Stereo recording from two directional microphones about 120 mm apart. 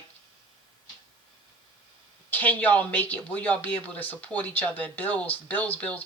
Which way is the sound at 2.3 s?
15° left (ahead or behind).